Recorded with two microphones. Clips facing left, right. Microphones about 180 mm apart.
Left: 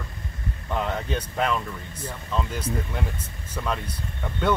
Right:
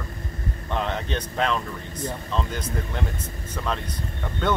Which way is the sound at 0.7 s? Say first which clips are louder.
Even; 5° left (ahead or behind).